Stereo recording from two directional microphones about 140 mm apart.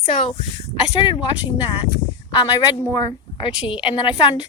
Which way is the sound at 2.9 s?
35° left (ahead or behind).